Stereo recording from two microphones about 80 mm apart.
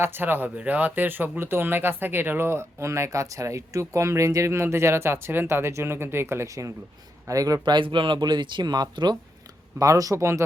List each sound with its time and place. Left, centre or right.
0.0 s speech: right
7.6 s speech: right
9.7 s speech: right